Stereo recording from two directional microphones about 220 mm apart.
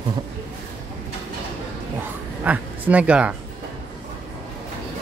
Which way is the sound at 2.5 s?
5° right (ahead or behind).